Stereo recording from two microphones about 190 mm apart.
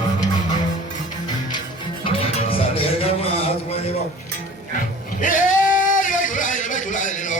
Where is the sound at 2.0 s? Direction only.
30° left (ahead or behind).